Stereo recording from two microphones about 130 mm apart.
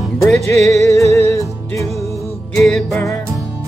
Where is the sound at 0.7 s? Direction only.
25° left (ahead or behind).